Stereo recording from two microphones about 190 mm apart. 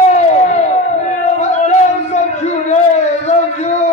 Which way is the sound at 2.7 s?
35° left (ahead or behind).